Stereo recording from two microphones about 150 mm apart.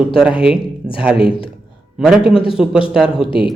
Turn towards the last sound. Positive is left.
turn(degrees=35)  # may be behind; listen again after turning